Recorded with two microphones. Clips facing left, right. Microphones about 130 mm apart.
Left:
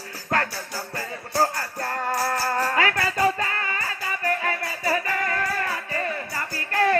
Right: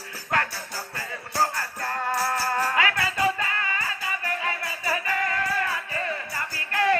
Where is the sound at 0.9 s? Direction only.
40° left (ahead or behind).